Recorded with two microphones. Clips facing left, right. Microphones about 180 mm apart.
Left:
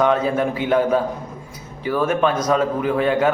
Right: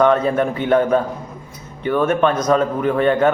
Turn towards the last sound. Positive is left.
turn(degrees=5)  # may be behind; listen again after turning